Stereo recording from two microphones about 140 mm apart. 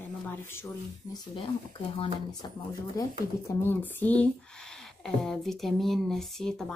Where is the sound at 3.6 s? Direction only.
15° left (ahead or behind).